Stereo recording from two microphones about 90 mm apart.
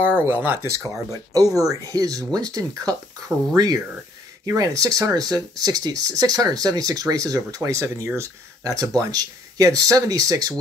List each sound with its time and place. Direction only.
0.3 s speech: 25° right (ahead or behind)
1.3 s speech: 40° right (ahead or behind)